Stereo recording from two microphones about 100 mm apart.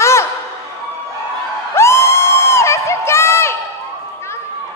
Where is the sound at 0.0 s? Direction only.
30° left (ahead or behind).